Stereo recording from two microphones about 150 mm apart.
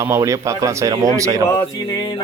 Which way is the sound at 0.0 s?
20° right (ahead or behind).